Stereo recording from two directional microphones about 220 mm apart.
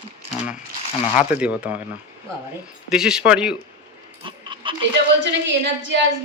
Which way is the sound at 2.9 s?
5° right (ahead or behind).